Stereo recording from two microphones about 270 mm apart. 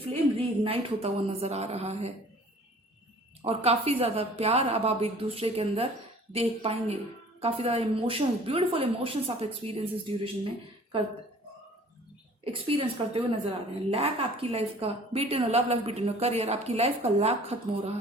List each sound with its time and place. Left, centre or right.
0.6 s a woman's voice: centre
3.4 s a woman's voice: right
12.5 s a woman's voice: centre